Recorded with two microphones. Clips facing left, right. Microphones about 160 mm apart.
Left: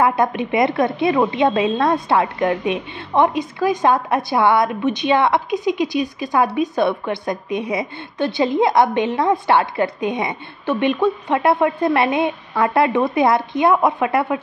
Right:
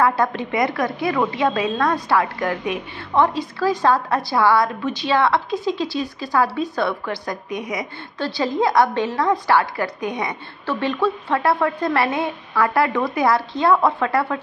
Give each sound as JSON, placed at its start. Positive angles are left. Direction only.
{"t": 0.0, "sound": "a woman's voice", "side_deg": 20}